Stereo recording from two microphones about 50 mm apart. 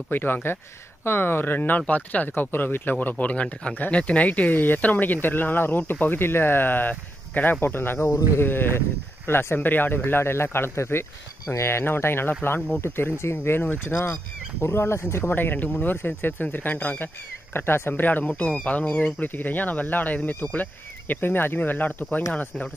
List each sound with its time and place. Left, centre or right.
0.1 s speech: left
1.8 s speech: left
13.8 s speech: left
15.3 s speech: left
17.6 s speech: left
18.2 s speech: left
19.2 s speech: left